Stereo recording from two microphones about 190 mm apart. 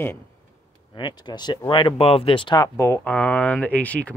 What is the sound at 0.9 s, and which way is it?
Speech, 25° left (ahead or behind).